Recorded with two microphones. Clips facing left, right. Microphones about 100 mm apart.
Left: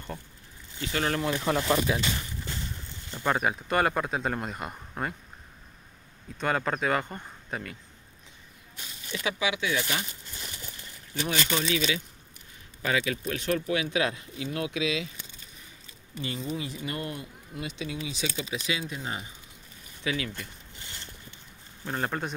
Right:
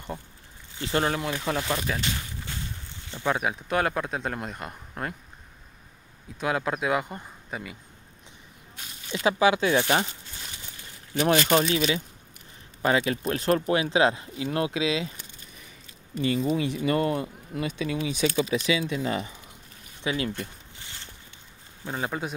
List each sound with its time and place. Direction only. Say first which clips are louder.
0.7 s speech: right 5 dB; 35° right (ahead or behind)
1.2 s speech: left 2 dB; centre (ahead or behind)
3.1 s speech: even; centre (ahead or behind)
6.4 s speech: right 1 dB; 5° right (ahead or behind)
9.1 s speech: right 8 dB; 35° right (ahead or behind)
11.1 s speech: right 8 dB; 45° right (ahead or behind)
16.3 s speech: right 9 dB; 80° right
17.6 s speech: right 6 dB; 55° right (ahead or behind); by 19.3 s 90° right
20.0 s speech: right 3 dB; 25° right (ahead or behind)
21.8 s speech: even; 5° right (ahead or behind)